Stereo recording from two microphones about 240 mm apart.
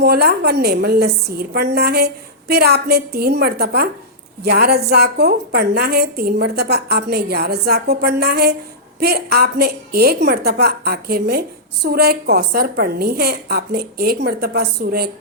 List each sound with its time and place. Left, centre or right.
0.0 s a woman's voice: right